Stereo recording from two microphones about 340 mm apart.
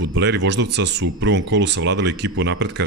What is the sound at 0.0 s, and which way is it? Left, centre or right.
Speech, right.